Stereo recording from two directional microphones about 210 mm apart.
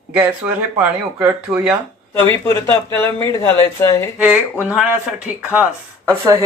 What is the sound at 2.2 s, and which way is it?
Speech, 10° left (ahead or behind).